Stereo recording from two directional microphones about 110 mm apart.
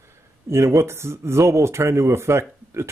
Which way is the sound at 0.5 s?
25° right (ahead or behind).